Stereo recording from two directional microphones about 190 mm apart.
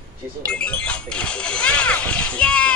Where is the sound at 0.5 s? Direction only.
5° left (ahead or behind).